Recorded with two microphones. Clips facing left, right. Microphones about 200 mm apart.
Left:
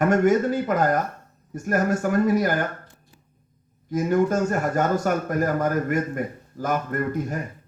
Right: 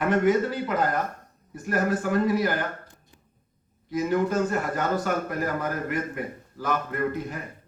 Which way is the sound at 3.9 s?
45° left (ahead or behind).